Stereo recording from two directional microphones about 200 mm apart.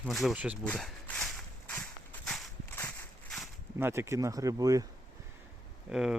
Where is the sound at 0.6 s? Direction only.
5° left (ahead or behind).